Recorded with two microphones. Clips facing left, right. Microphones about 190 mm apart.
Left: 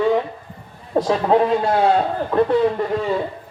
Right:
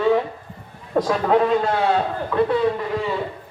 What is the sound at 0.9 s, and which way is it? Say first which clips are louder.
Speech: left 2 dB; 30° left (ahead or behind).